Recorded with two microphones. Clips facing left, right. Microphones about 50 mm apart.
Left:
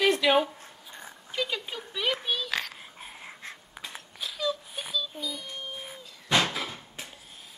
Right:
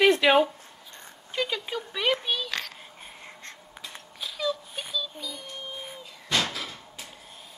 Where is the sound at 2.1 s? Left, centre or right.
Centre.